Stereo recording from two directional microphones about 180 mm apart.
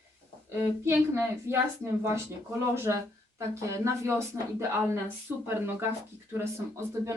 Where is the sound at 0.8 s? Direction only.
15° right (ahead or behind).